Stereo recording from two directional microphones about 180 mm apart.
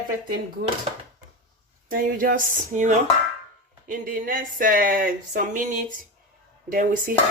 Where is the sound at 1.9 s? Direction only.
50° right (ahead or behind).